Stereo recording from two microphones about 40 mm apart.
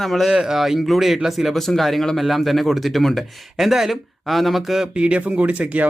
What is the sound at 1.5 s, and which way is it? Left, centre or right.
Speech, centre.